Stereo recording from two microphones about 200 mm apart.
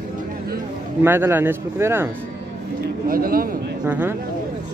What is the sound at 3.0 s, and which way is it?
Speech, 45° right (ahead or behind).